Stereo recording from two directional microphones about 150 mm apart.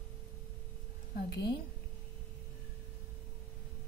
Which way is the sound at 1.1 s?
90° left.